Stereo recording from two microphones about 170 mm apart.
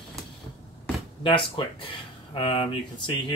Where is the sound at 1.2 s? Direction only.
30° left (ahead or behind).